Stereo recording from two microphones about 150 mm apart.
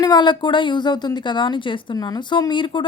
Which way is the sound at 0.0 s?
30° left (ahead or behind).